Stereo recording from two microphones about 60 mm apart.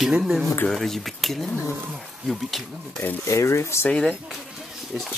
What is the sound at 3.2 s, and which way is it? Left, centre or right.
Speech, left.